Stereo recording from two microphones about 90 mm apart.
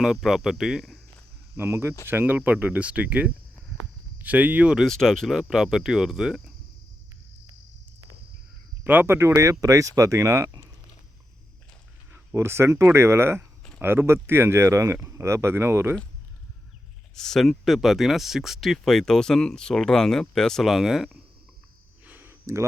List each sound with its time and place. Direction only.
0.0 s speech: 5° right (ahead or behind)
1.5 s speech: 25° right (ahead or behind); by 4.9 s 10° right (ahead or behind)
4.9 s speech: 5° left (ahead or behind)
8.8 s speech: 20° right (ahead or behind)
12.1 s speech: 30° right (ahead or behind)
17.2 s speech: 5° left (ahead or behind)
22.0 s a sound: 20° right (ahead or behind)